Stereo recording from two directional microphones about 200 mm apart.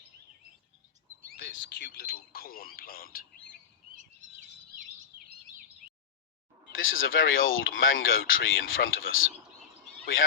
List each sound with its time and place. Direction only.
1.8 s speech: 50° left (ahead or behind)
6.7 s speech: 80° left